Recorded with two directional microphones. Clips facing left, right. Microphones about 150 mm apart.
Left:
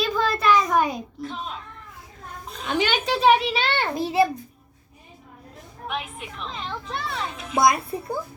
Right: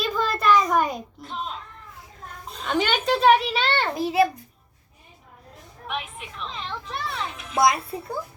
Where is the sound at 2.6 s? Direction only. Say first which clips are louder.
Right 1 dB; 5° left (ahead or behind).